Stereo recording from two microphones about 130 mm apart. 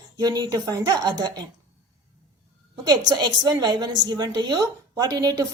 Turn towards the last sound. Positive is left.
turn(degrees=-25)  # may be behind; listen again after turning